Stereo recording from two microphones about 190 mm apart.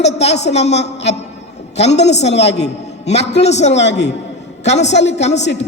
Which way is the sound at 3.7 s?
65° left (ahead or behind).